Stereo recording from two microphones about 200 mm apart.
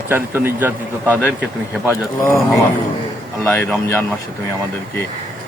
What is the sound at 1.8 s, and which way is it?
Speech, 15° left (ahead or behind).